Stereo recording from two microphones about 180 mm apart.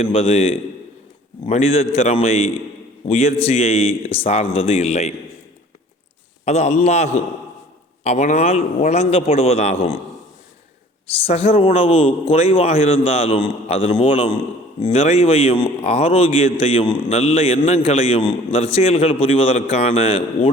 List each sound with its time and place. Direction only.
0.0 s a man's voice: 35° left (ahead or behind)
6.4 s a man's voice: 40° left (ahead or behind)
11.3 s a man's voice: 35° left (ahead or behind)